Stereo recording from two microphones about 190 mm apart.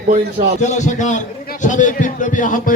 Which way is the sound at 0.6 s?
40° left (ahead or behind).